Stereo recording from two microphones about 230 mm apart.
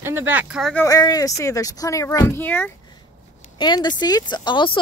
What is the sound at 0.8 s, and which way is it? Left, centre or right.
Speech, centre.